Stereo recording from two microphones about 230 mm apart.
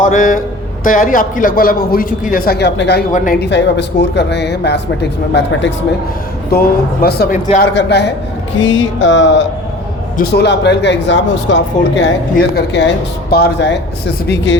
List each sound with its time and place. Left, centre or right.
0.0 s a man's voice: left